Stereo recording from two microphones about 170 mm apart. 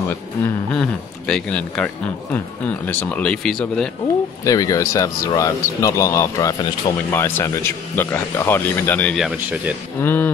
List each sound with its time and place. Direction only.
0.1 s speech: 10° left (ahead or behind)
4.5 s speech: 20° left (ahead or behind); by 9.8 s 5° right (ahead or behind)
10.0 s speech: 10° left (ahead or behind)